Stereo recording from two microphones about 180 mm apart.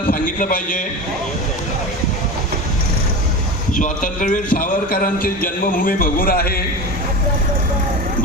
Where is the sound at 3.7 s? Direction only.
45° left (ahead or behind).